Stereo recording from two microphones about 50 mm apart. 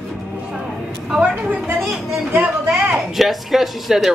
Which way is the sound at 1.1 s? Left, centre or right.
Centre.